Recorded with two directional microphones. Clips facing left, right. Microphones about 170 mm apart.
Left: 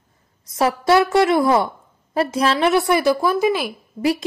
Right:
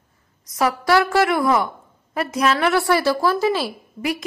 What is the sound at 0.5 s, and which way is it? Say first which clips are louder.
A woman's voice: left 2 dB; 25° left (ahead or behind).